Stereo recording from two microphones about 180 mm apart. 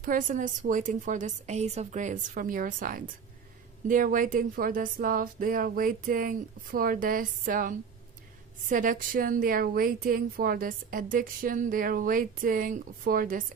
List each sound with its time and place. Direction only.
0.0 s a woman's voice: 50° right (ahead or behind)